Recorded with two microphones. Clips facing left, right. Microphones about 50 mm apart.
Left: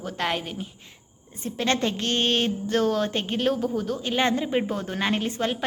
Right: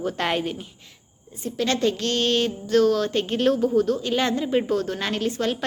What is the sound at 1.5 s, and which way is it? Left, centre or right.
Speech, left.